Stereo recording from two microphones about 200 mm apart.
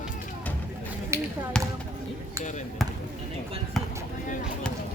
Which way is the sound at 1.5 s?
5° left (ahead or behind).